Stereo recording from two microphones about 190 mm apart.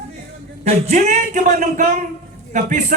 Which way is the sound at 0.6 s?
35° right (ahead or behind).